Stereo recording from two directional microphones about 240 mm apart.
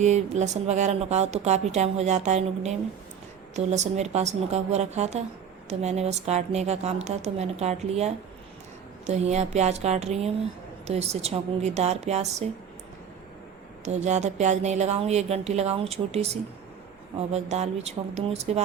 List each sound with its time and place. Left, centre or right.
0.0 s a woman's voice: right
13.8 s a woman's voice: right